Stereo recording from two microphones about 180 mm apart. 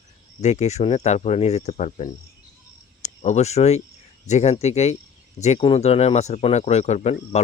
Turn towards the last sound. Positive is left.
turn(degrees=35)  # may be behind; listen again after turning